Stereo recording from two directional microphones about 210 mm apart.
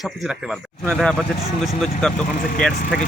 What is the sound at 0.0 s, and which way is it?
Speech, centre (ahead or behind).